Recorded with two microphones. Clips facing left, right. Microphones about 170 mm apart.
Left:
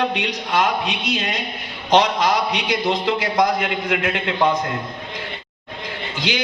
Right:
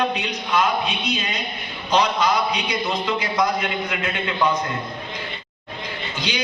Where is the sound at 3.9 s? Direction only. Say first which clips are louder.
Left 4 dB; 70° left (ahead or behind).